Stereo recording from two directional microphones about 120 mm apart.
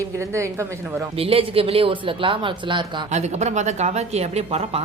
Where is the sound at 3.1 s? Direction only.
70° right (ahead or behind).